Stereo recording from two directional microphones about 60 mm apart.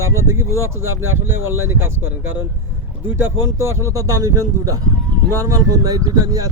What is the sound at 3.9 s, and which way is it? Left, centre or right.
Speech, right.